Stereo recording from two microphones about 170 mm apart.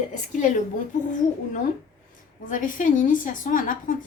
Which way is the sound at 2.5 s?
50° left (ahead or behind).